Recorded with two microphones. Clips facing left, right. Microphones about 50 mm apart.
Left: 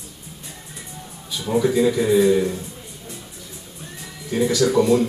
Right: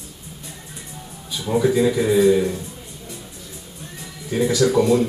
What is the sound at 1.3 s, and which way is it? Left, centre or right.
Speech, centre.